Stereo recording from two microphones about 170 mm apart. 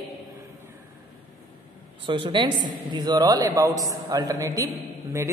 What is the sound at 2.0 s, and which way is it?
A woman's voice, 30° right (ahead or behind).